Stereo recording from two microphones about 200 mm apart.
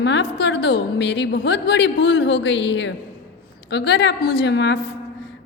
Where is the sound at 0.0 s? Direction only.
60° left (ahead or behind).